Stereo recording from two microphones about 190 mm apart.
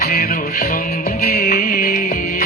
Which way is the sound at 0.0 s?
50° left (ahead or behind).